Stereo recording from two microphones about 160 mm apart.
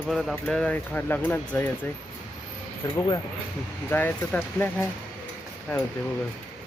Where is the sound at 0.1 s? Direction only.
Centre (ahead or behind).